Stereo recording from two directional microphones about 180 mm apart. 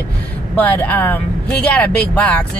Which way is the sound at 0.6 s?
10° left (ahead or behind).